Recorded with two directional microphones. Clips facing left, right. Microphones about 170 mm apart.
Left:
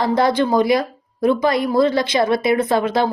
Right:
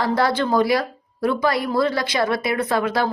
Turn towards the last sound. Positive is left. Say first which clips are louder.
# left 3 dB
turn(degrees=20)  # may be behind; listen again after turning